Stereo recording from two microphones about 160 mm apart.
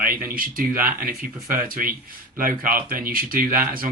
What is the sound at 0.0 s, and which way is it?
Speech, 60° right (ahead or behind).